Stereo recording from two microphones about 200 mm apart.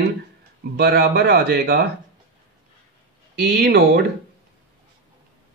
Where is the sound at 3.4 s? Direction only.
55° right (ahead or behind).